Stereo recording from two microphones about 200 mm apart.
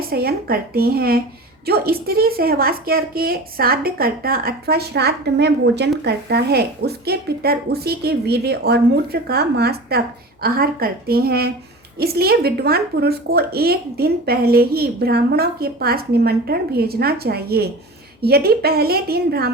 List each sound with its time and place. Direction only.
0.0 s speech: 50° right (ahead or behind)